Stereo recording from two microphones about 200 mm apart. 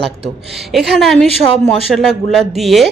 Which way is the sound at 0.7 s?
Centre (ahead or behind).